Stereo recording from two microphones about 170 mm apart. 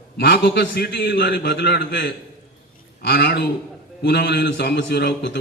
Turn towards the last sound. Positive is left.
turn(degrees=80)